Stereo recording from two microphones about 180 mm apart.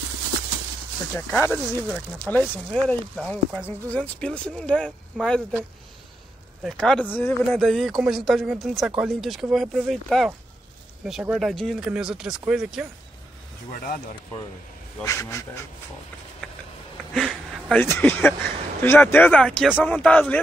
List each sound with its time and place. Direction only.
1.1 s speech: 10° left (ahead or behind)
13.7 s speech: 50° left (ahead or behind)
15.0 s speech: 15° left (ahead or behind)
17.1 s speech: 5° left (ahead or behind)